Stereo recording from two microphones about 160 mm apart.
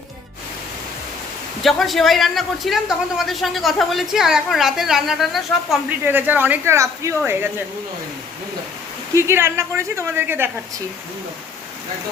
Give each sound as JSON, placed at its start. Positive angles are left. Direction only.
{"t": 1.6, "sound": "a man's voice", "side_deg": 0}
{"t": 6.0, "sound": "speech", "side_deg": -10}
{"t": 9.1, "sound": "speech", "side_deg": -15}